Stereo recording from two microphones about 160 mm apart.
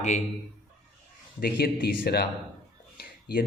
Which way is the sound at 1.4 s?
75° left (ahead or behind).